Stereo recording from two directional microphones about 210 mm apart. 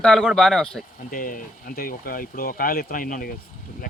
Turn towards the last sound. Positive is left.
turn(degrees=40)  # may be behind; listen again after turning